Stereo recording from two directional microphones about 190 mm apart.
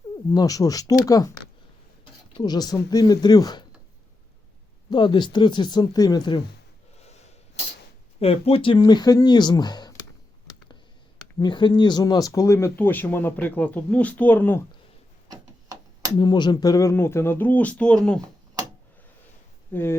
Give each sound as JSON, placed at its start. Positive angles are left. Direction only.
{"t": 0.3, "sound": "speech", "side_deg": 20}
{"t": 4.9, "sound": "speech", "side_deg": 25}
{"t": 8.2, "sound": "speech", "side_deg": 30}
{"t": 11.3, "sound": "speech", "side_deg": 25}
{"t": 15.3, "sound": "tick-tock", "side_deg": -20}
{"t": 16.1, "sound": "speech", "side_deg": 25}
{"t": 19.7, "sound": "speech", "side_deg": 10}